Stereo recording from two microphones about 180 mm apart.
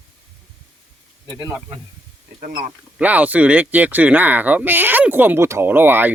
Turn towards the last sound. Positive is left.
turn(degrees=-10)  # may be behind; listen again after turning